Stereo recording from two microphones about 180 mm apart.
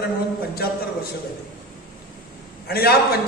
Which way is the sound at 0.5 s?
60° left (ahead or behind).